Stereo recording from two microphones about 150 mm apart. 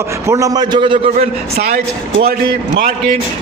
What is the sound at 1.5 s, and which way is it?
A man's voice, 90° right.